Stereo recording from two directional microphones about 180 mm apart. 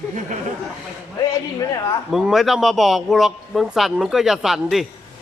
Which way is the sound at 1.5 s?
20° left (ahead or behind).